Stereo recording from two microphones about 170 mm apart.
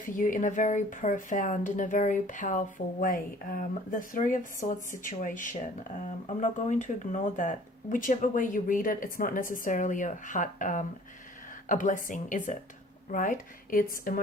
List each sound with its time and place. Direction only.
0.0 s speech: 50° left (ahead or behind)